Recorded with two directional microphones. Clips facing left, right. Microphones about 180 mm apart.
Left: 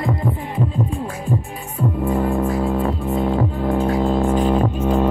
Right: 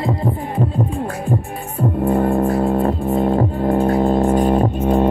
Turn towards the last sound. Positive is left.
turn(degrees=-45)  # may be behind; listen again after turning